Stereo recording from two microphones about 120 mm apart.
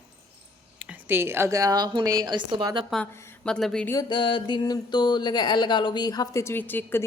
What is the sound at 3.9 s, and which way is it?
Speech, 35° left (ahead or behind).